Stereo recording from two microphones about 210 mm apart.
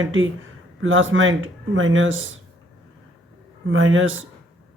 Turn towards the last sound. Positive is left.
turn(degrees=-70)  # may be behind; listen again after turning